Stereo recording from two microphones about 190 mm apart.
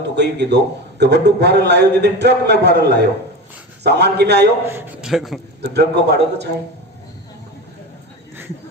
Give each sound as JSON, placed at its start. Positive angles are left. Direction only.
{"t": 0.2, "sound": "a man's voice", "side_deg": -60}
{"t": 4.7, "sound": "a man's voice", "side_deg": -5}
{"t": 5.7, "sound": "a man's voice", "side_deg": -60}